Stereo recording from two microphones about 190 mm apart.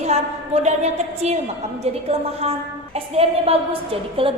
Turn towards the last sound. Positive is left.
turn(degrees=-30)  # may be behind; listen again after turning